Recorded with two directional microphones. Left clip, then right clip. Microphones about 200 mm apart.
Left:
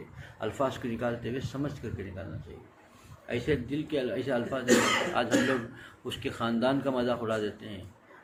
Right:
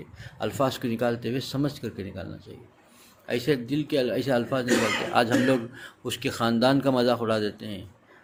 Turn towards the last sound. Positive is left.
turn(degrees=-60)  # may be behind; listen again after turning